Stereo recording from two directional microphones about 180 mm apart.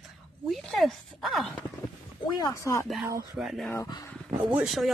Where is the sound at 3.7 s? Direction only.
20° left (ahead or behind).